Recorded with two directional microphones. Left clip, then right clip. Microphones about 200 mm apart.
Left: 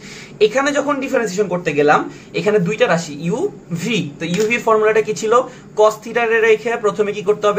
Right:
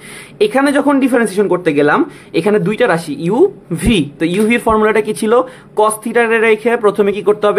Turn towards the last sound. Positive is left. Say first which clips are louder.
# right 4 dB
turn(degrees=-45)  # may be behind; listen again after turning